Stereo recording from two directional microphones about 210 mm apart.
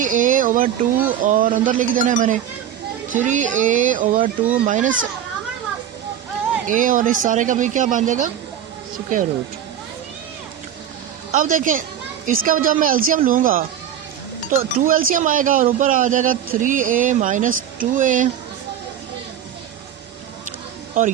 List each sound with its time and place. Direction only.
0.0 s speech: 40° right (ahead or behind)
6.7 s speech: 40° right (ahead or behind)
11.3 s speech: 35° right (ahead or behind)